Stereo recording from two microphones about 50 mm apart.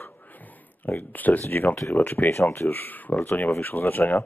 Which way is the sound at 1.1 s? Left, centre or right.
Left.